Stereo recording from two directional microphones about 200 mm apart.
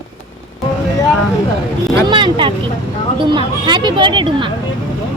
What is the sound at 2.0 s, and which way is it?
Speech, 25° right (ahead or behind).